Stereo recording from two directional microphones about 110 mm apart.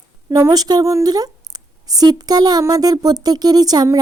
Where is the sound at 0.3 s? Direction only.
30° right (ahead or behind).